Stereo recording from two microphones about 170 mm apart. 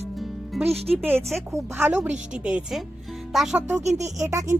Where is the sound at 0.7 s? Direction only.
10° right (ahead or behind).